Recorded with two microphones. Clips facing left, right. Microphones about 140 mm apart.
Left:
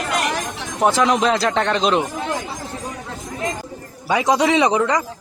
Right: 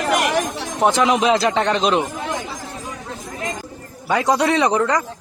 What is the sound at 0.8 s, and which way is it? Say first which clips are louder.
Speech: even; centre (ahead or behind).